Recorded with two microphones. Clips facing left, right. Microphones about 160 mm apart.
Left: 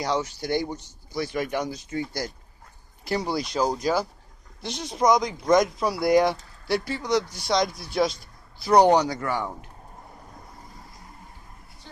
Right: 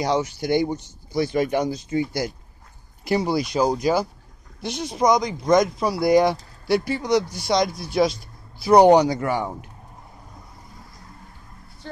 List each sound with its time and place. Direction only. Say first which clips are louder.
0.0 s speech: right 4 dB; 20° right (ahead or behind); by 6.3 s centre (ahead or behind)
6.9 s speech: right 4 dB; 15° right (ahead or behind)
7.4 s speech: right 3 dB; 5° right (ahead or behind)